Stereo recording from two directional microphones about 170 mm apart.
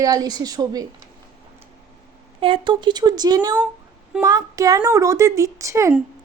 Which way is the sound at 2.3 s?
30° right (ahead or behind).